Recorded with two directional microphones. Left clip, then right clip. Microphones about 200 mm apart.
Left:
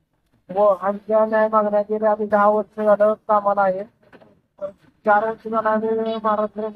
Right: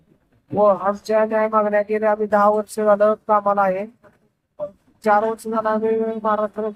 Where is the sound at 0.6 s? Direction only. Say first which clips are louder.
Right 1 dB; 10° right (ahead or behind).